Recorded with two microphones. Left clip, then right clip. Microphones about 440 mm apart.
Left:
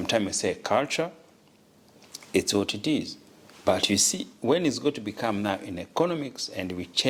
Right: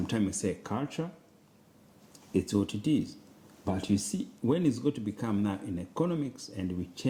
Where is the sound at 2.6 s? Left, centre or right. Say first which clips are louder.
Left 3 dB; left.